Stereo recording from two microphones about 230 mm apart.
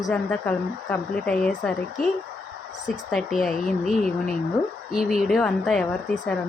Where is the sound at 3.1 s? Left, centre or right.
Centre.